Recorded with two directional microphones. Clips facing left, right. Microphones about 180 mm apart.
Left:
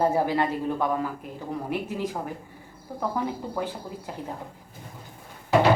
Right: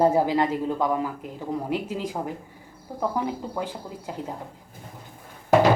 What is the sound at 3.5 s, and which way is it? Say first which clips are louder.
Speech: even; 10° right (ahead or behind).